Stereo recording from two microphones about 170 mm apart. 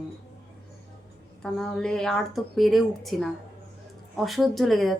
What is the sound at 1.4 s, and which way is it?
Speech, 5° left (ahead or behind).